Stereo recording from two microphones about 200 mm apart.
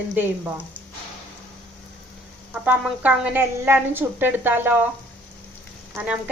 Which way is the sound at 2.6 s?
10° right (ahead or behind).